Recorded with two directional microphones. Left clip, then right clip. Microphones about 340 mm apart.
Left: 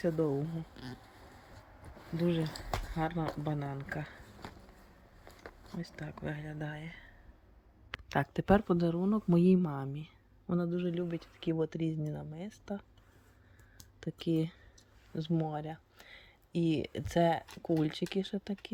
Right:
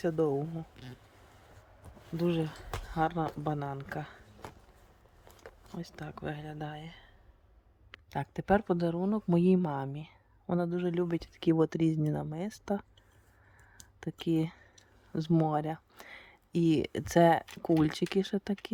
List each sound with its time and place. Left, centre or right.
2.1 s speech: centre
8.1 s speech: centre